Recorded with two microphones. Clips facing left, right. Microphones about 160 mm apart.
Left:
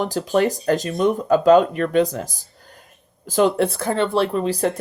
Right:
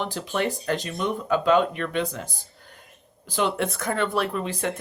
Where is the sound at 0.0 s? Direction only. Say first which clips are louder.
Left 7 dB; 40° left (ahead or behind).